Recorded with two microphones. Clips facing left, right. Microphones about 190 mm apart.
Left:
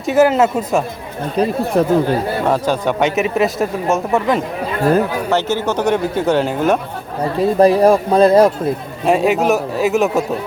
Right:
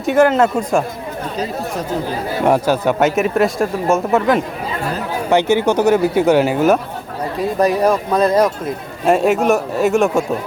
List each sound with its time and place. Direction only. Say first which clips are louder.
0.0 s speech: even; 5° left (ahead or behind)
1.4 s speech: left 9 dB; 60° left (ahead or behind)
2.5 s speech: right 4 dB; 5° right (ahead or behind)
5.3 s speech: right 7 dB; 15° right (ahead or behind)
7.3 s speech: left 4 dB; 30° left (ahead or behind)
9.0 s speech: even; centre (ahead or behind)